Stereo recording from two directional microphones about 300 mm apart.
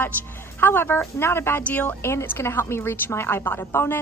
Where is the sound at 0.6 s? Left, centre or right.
Centre.